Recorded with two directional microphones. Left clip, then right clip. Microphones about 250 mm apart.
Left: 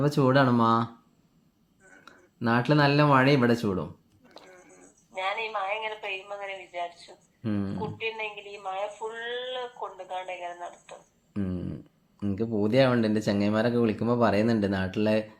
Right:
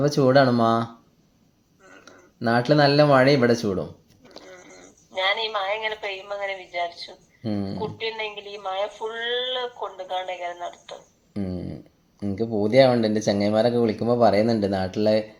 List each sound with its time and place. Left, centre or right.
0.0 s speech: centre
2.0 s speech: centre
4.5 s a sound: right
7.4 s speech: centre
7.9 s speech: right
12.3 s speech: centre